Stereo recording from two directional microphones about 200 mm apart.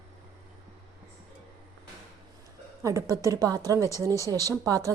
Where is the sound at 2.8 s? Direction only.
15° right (ahead or behind).